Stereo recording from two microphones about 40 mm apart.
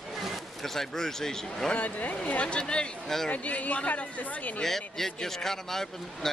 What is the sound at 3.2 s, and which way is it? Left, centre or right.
Speech, left.